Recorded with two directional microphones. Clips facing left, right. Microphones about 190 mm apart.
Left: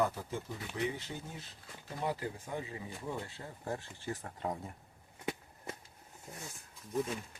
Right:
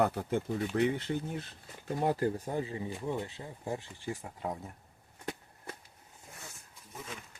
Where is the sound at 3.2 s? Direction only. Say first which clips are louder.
Right 4 dB; 15° right (ahead or behind); by 4.7 s centre (ahead or behind).